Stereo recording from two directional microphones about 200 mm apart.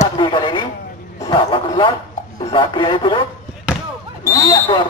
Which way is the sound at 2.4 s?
25° left (ahead or behind).